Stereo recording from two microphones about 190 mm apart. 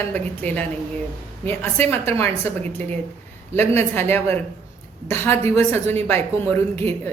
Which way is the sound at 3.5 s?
10° left (ahead or behind).